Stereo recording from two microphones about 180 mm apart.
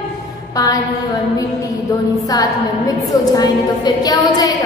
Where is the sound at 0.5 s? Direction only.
20° left (ahead or behind).